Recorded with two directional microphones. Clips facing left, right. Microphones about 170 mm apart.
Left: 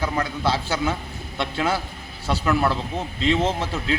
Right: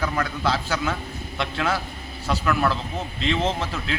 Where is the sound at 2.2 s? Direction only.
25° left (ahead or behind).